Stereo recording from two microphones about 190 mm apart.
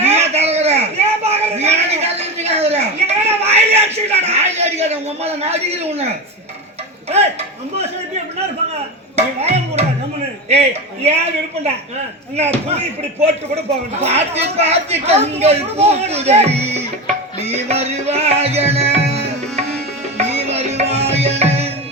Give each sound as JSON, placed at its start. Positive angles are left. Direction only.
{"t": 0.0, "sound": "a sound", "side_deg": -35}
{"t": 9.1, "sound": "music", "side_deg": -35}
{"t": 10.5, "sound": "speech", "side_deg": -35}
{"t": 12.4, "sound": "speech", "side_deg": -35}
{"t": 14.0, "sound": "speech", "side_deg": -35}
{"t": 17.4, "sound": "music", "side_deg": -35}